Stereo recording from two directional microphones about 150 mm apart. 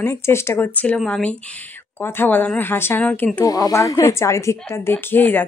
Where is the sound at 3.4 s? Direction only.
25° left (ahead or behind).